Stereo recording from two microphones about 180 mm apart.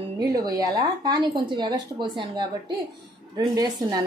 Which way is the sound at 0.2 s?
20° right (ahead or behind).